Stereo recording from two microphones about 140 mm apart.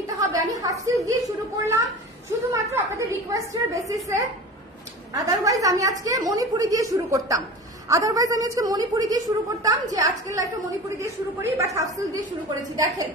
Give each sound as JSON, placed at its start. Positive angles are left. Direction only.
{"t": 0.0, "sound": "a sound", "side_deg": -25}
{"t": 1.0, "sound": "a woman's voice", "side_deg": -25}
{"t": 2.5, "sound": "a woman's voice", "side_deg": -20}